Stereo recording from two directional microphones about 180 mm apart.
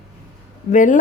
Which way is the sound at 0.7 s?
45° left (ahead or behind).